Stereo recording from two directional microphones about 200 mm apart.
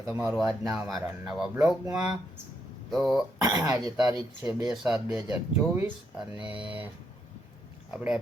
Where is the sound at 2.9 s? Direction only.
Centre (ahead or behind).